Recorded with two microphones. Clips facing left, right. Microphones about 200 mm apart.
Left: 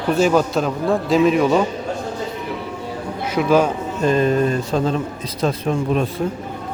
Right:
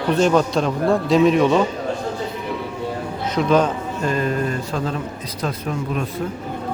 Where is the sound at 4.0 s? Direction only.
20° left (ahead or behind).